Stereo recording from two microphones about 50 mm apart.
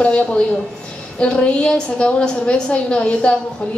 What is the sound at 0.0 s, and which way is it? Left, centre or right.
A woman's voice, left.